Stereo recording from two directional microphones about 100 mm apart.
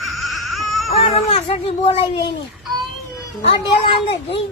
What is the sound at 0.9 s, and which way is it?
Speech, 80° left.